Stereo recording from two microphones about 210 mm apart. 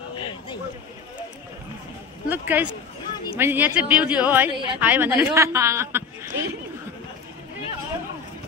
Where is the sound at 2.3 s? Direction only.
10° right (ahead or behind).